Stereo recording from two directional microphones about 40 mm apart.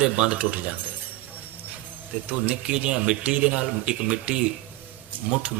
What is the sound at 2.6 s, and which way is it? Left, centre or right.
A man's voice, right.